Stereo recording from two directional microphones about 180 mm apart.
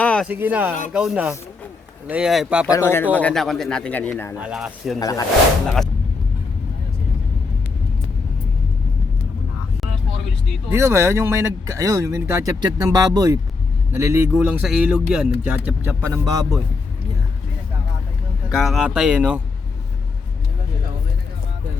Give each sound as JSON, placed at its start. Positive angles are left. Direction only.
{"t": 0.0, "sound": "a sound", "side_deg": 5}
{"t": 0.3, "sound": "speech", "side_deg": -10}
{"t": 2.6, "sound": "speech", "side_deg": 15}
{"t": 4.4, "sound": "speech", "side_deg": -5}
{"t": 4.9, "sound": "speech", "side_deg": 20}
{"t": 10.7, "sound": "speech", "side_deg": -15}
{"t": 18.5, "sound": "speech", "side_deg": 0}